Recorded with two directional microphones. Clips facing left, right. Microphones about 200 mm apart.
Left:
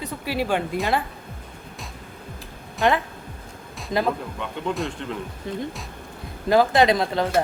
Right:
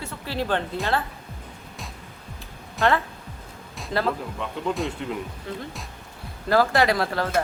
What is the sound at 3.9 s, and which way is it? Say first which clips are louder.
Speech: left 2 dB; 15° left (ahead or behind).